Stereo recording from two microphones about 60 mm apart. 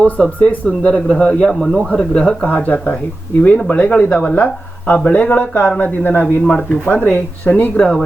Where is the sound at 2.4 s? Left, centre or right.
Left.